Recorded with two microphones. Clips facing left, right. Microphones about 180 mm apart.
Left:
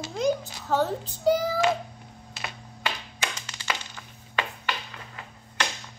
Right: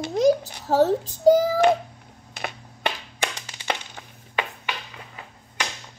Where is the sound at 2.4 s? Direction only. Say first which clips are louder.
Right 6 dB; 55° right (ahead or behind).